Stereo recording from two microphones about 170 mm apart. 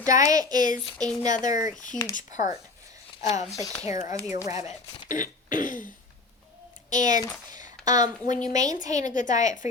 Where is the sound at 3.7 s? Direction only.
20° right (ahead or behind).